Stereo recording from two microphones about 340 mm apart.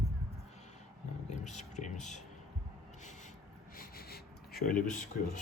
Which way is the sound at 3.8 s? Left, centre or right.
Left.